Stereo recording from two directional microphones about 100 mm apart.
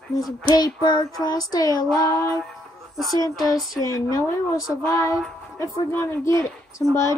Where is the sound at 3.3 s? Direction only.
Centre (ahead or behind).